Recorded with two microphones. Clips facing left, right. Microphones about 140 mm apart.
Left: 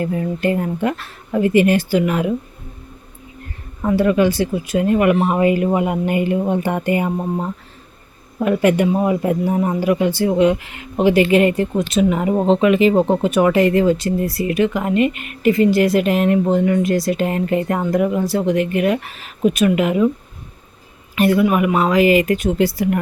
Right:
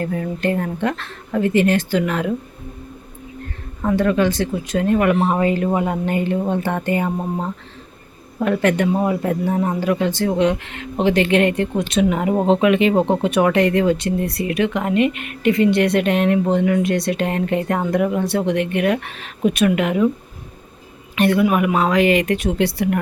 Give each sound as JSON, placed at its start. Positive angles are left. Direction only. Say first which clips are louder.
{"t": 0.0, "sound": "speech", "louder": "left 2 dB", "side_deg": 5}
{"t": 3.8, "sound": "speech", "louder": "left 2 dB", "side_deg": 10}
{"t": 21.2, "sound": "speech", "louder": "left 1 dB", "side_deg": 0}